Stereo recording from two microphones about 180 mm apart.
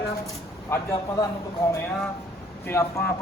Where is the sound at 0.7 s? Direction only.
15° left (ahead or behind).